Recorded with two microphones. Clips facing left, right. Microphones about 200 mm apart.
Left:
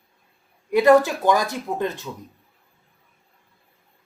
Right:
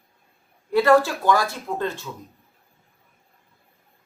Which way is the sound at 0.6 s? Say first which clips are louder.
Left 2 dB; 20° left (ahead or behind).